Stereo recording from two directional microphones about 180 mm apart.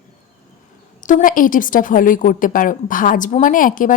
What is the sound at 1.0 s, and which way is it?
A woman's voice, 45° left (ahead or behind).